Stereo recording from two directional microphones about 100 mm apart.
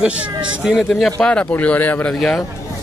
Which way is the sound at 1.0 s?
10° left (ahead or behind).